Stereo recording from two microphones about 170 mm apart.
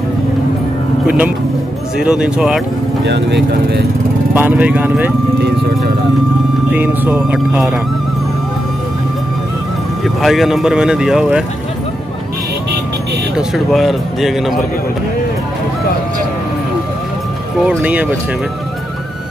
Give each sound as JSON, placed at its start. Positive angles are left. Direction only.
{"t": 1.0, "sound": "speech", "side_deg": -5}
{"t": 3.1, "sound": "speech", "side_deg": -90}
{"t": 4.3, "sound": "speech", "side_deg": -10}
{"t": 6.7, "sound": "speech", "side_deg": -10}
{"t": 10.0, "sound": "speech", "side_deg": 0}
{"t": 13.4, "sound": "speech", "side_deg": 0}
{"t": 17.6, "sound": "speech", "side_deg": -10}